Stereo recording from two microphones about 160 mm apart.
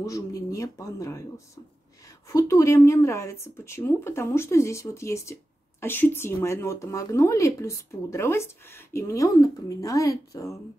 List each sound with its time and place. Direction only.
0.0 s speech: 20° left (ahead or behind)